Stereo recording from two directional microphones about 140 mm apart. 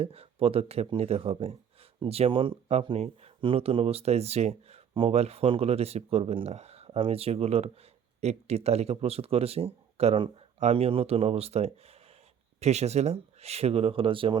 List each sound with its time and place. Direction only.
0.0 s speech: 45° right (ahead or behind)